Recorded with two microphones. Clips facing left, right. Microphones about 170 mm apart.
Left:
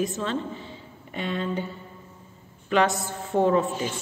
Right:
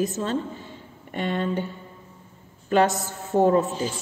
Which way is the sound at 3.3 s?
45° right (ahead or behind).